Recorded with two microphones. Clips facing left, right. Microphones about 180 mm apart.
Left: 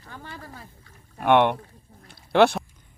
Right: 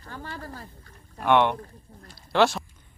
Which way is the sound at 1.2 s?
55° left (ahead or behind).